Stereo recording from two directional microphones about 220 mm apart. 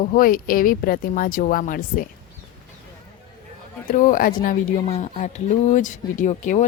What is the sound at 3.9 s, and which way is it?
Speech, 35° left (ahead or behind).